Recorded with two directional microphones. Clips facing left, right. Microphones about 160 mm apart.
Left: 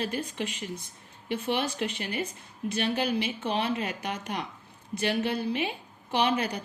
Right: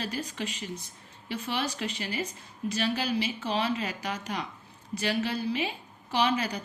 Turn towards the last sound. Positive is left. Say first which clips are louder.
# left 1 dB
turn(degrees=55)  # may be behind; listen again after turning